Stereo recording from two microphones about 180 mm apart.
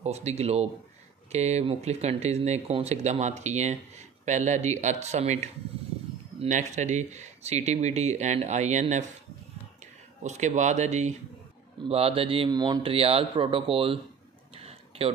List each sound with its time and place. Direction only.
0.0 s speech: 40° right (ahead or behind)
10.2 s speech: 40° right (ahead or behind)
14.5 s a sound: 35° right (ahead or behind)